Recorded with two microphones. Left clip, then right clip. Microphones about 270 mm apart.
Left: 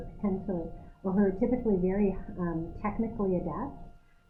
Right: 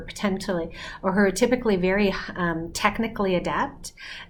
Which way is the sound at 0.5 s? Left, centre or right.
Centre.